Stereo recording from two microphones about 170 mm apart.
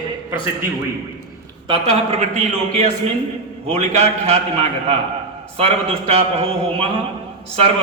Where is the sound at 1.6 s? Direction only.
35° right (ahead or behind).